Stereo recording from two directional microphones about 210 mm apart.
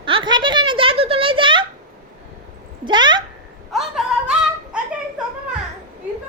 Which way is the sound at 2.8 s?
20° right (ahead or behind).